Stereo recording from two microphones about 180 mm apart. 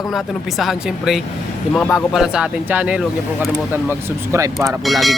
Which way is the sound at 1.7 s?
10° left (ahead or behind).